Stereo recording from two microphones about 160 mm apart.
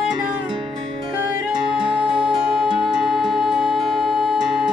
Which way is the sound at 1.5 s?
30° right (ahead or behind).